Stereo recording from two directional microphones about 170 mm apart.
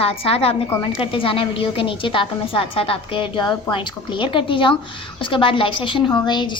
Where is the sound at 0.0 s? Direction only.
35° left (ahead or behind).